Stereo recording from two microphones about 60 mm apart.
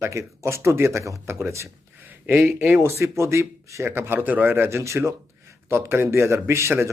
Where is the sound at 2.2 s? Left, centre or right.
Right.